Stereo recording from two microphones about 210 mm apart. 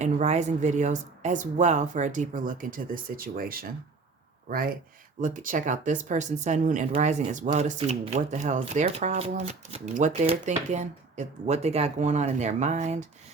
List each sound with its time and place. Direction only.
0.0 s speech: 35° right (ahead or behind)